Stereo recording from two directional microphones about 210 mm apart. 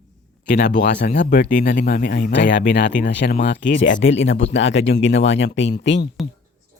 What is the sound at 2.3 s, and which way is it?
Speech, 55° left (ahead or behind).